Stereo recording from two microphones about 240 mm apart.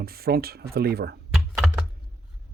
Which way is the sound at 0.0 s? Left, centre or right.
Right.